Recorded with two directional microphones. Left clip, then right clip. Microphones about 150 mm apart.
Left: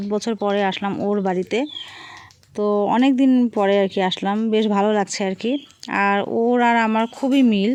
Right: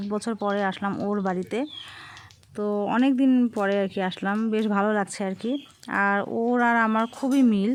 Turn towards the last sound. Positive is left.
turn(degrees=10)  # may be behind; listen again after turning